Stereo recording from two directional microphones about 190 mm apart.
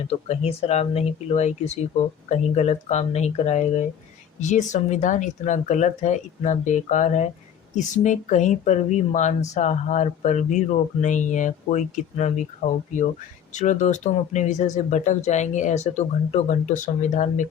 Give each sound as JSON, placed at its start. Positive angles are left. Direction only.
{"t": 0.1, "sound": "speech", "side_deg": 35}